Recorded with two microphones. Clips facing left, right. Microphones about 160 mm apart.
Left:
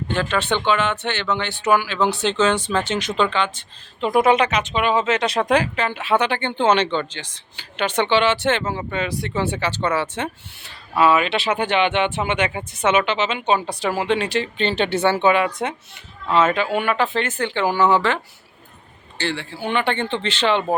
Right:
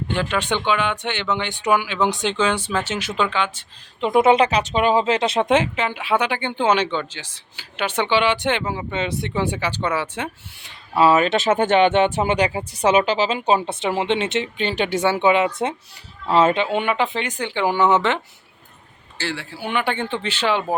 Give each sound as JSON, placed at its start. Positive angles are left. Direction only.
{"t": 0.1, "sound": "speech", "side_deg": -15}
{"t": 4.0, "sound": "speech", "side_deg": -25}
{"t": 8.9, "sound": "speech", "side_deg": -20}
{"t": 10.9, "sound": "speech", "side_deg": -35}
{"t": 14.6, "sound": "speech", "side_deg": -10}
{"t": 19.1, "sound": "speech", "side_deg": -5}